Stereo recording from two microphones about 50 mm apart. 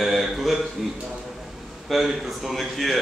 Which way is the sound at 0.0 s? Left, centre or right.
Centre.